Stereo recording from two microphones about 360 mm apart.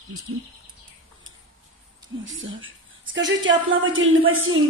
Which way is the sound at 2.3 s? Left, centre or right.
Right.